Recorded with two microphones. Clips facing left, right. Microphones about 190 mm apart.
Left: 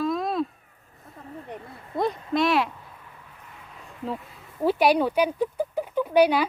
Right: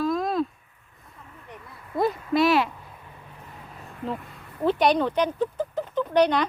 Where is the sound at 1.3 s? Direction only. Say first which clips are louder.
Left 7 dB; 40° left (ahead or behind).